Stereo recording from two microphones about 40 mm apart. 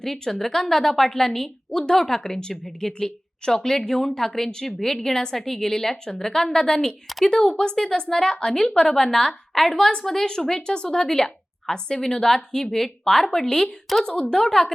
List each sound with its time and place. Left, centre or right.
0.0 s a woman's voice: centre